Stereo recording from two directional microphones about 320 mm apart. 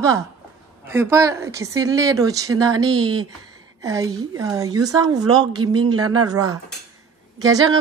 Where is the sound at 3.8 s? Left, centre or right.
Centre.